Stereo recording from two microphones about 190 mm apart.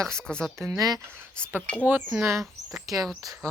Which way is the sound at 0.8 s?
20° right (ahead or behind).